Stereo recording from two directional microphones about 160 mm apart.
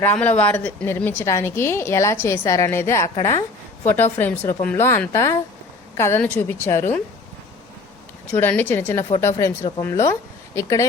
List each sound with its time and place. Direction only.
0.0 s a woman's voice: 10° left (ahead or behind)
8.4 s a woman's voice: 10° left (ahead or behind)